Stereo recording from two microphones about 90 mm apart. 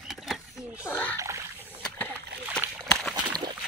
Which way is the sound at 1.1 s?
35° right (ahead or behind).